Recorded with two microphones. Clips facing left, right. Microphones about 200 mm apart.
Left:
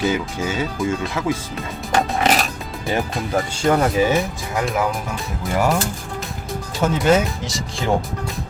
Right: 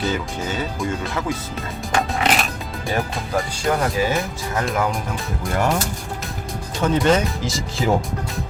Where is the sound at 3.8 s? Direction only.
15° left (ahead or behind).